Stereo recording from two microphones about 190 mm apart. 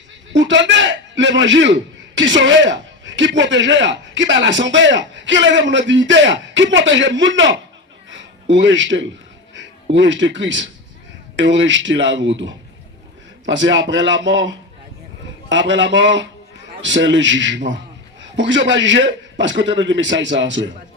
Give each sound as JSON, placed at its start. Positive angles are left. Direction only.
{"t": 0.3, "sound": "a man's voice", "side_deg": -70}
{"t": 8.1, "sound": "a sound", "side_deg": -75}
{"t": 9.6, "sound": "a man's voice", "side_deg": -70}
{"t": 13.5, "sound": "a man's voice", "side_deg": -75}